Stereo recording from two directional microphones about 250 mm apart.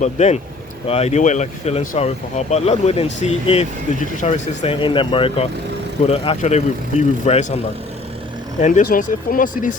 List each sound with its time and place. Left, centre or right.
0.0 s speech: left
8.6 s speech: left